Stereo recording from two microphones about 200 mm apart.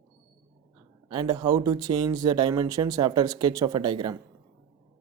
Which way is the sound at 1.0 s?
20° right (ahead or behind).